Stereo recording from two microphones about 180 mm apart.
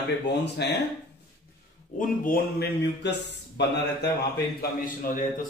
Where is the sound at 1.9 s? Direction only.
50° left (ahead or behind); by 4.2 s 70° left (ahead or behind).